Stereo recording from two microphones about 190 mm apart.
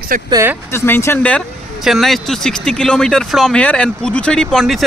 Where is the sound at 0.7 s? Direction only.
10° left (ahead or behind).